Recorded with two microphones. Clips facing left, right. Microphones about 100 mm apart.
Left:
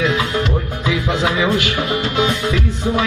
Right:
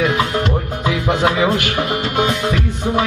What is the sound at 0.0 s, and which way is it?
Music, 50° right (ahead or behind).